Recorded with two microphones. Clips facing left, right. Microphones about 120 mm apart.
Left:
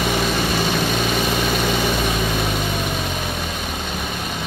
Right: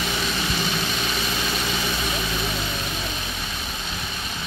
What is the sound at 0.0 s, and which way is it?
Vehicle, 60° left (ahead or behind).